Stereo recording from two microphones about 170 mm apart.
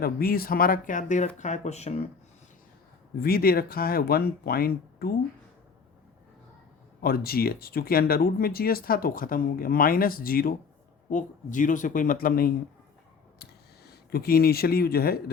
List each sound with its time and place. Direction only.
0.0 s speech: 60° left (ahead or behind); by 2.0 s 40° left (ahead or behind)
3.2 s speech: 60° left (ahead or behind)
7.0 s speech: 65° left (ahead or behind)
14.1 s speech: 65° left (ahead or behind)